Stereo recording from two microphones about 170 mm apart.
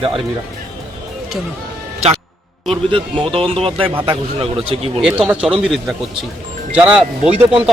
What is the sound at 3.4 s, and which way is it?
Speech, 35° right (ahead or behind).